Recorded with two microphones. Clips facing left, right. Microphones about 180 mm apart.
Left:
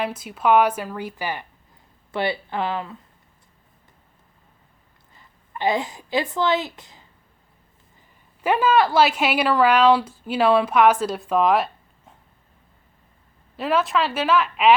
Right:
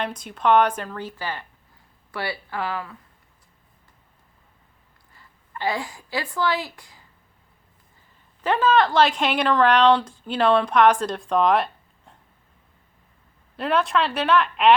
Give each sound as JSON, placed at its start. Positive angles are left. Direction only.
{"t": 0.0, "sound": "speech", "side_deg": 5}
{"t": 5.1, "sound": "a woman's voice", "side_deg": 20}
{"t": 8.4, "sound": "speech", "side_deg": 10}
{"t": 13.6, "sound": "speech", "side_deg": 0}